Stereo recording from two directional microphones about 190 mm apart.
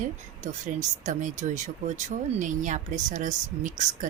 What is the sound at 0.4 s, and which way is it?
Speech, 40° right (ahead or behind).